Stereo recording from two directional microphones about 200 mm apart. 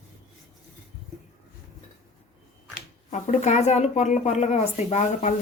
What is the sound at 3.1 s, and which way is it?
Speech, 35° left (ahead or behind).